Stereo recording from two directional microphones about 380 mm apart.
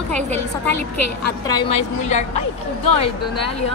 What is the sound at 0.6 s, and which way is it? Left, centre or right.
Speech, right.